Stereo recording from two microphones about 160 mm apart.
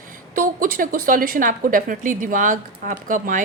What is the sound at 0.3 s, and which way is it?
A woman's voice, 60° right (ahead or behind).